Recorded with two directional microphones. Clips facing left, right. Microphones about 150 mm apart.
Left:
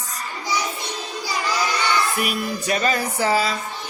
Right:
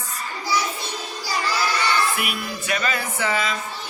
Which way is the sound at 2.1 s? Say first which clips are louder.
Left 4 dB; 40° left (ahead or behind).